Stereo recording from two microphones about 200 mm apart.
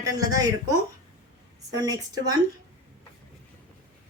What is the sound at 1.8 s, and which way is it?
Speech, 20° right (ahead or behind).